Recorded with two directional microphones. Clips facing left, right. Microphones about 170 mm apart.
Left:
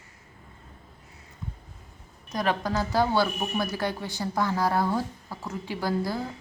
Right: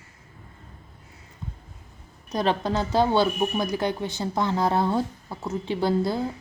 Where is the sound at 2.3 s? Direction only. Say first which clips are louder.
Right 3 dB; 25° right (ahead or behind).